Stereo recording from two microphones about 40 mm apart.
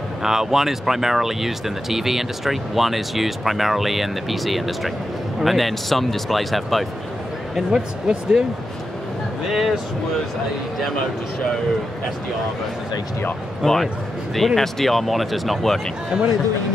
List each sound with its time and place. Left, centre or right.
0.2 s speech: centre
8.1 s speech: centre
9.5 s speech: centre
13.6 s speech: centre
16.1 s speech: centre